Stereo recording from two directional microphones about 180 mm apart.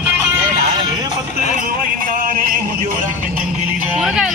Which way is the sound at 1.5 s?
50° right (ahead or behind).